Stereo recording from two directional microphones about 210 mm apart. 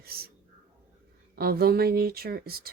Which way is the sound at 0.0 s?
45° right (ahead or behind).